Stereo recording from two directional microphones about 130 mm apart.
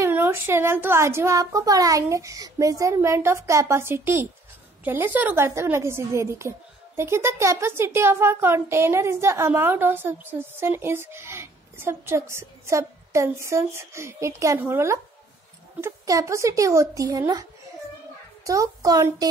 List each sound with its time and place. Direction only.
0.0 s speech: 15° right (ahead or behind)